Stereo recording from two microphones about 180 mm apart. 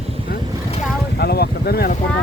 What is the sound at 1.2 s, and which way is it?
Vehicle, 60° left (ahead or behind).